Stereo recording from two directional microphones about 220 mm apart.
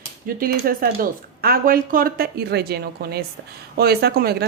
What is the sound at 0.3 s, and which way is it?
Speech, 40° right (ahead or behind).